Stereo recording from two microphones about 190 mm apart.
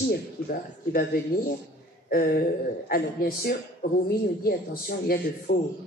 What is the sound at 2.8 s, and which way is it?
A woman's voice, 50° left (ahead or behind).